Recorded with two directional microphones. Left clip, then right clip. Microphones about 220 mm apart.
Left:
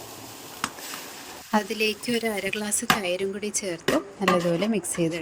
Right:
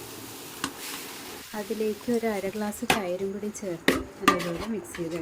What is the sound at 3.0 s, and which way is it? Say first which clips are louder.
Speech: left 3 dB; 45° left (ahead or behind).